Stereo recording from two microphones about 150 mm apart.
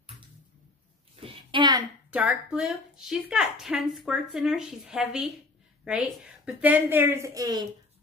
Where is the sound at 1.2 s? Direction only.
30° right (ahead or behind).